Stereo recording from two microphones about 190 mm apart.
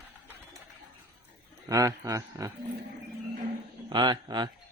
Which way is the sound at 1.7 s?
20° right (ahead or behind).